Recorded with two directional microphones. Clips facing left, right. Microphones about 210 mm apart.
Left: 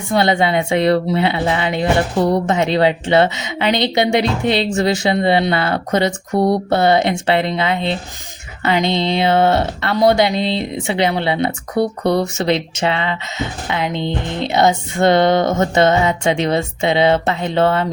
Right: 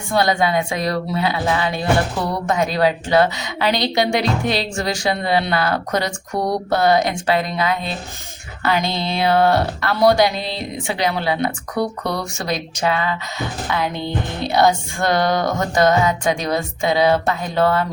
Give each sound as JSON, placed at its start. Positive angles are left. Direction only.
{"t": 0.1, "sound": "speech", "side_deg": 25}